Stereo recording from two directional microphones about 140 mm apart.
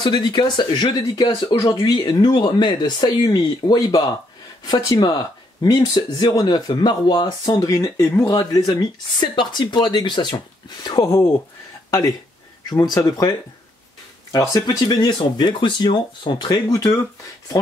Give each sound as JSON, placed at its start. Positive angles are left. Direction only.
{"t": 0.0, "sound": "speech", "side_deg": 35}
{"t": 12.6, "sound": "speech", "side_deg": 30}
{"t": 14.3, "sound": "speech", "side_deg": 25}